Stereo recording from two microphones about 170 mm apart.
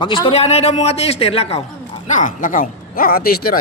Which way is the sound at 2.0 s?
50° left (ahead or behind).